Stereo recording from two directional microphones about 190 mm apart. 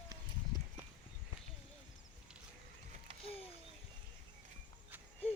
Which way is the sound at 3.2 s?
30° left (ahead or behind).